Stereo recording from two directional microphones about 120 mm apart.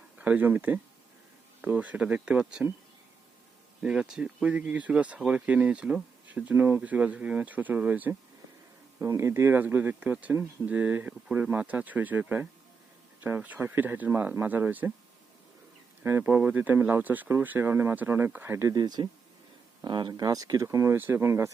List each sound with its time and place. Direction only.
0.2 s speech: 15° right (ahead or behind)
3.8 s speech: 5° right (ahead or behind)
16.0 s speech: 15° right (ahead or behind)